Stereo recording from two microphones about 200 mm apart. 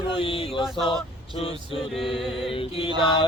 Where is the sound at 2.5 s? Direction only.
25° left (ahead or behind).